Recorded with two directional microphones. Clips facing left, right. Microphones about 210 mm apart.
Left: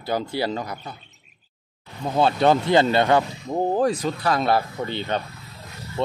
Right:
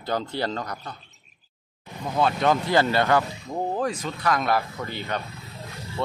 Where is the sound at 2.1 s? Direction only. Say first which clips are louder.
Left 4 dB; 30° left (ahead or behind).